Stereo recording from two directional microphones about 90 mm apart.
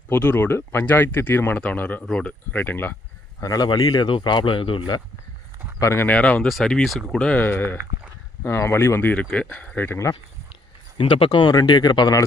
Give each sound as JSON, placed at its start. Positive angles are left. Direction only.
{"t": 0.1, "sound": "speech", "side_deg": 20}
{"t": 3.4, "sound": "speech", "side_deg": 40}
{"t": 4.1, "sound": "speech", "side_deg": 60}
{"t": 5.8, "sound": "speech", "side_deg": 30}
{"t": 6.1, "sound": "speech", "side_deg": 15}
{"t": 6.5, "sound": "speech", "side_deg": 5}
{"t": 10.5, "sound": "speech", "side_deg": 75}